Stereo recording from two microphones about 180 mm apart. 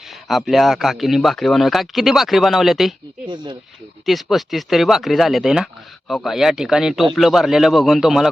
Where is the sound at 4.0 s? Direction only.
Centre (ahead or behind).